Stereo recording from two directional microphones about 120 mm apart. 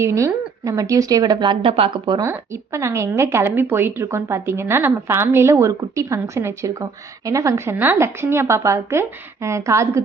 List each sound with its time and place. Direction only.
0.0 s a woman's voice: 25° right (ahead or behind); by 2.1 s 50° right (ahead or behind)
2.2 s a woman's voice: 20° right (ahead or behind)